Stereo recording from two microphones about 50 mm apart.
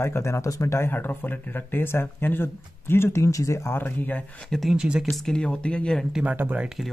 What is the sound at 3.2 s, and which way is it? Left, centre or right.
Speech, left.